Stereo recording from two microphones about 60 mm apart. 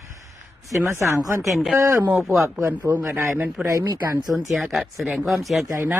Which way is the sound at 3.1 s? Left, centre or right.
Right.